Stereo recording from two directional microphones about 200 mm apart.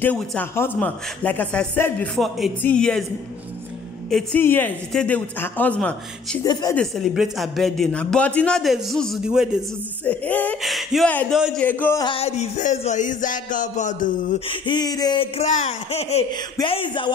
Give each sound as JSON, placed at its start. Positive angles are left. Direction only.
{"t": 0.0, "sound": "a man's voice", "side_deg": 5}
{"t": 4.1, "sound": "a man's voice", "side_deg": 10}
{"t": 6.4, "sound": "speech", "side_deg": 20}
{"t": 6.7, "sound": "a man's voice", "side_deg": 0}
{"t": 10.0, "sound": "a man's voice", "side_deg": 10}
{"t": 11.6, "sound": "a man's voice", "side_deg": 10}
{"t": 12.1, "sound": "a sound", "side_deg": 30}
{"t": 14.5, "sound": "speech", "side_deg": 25}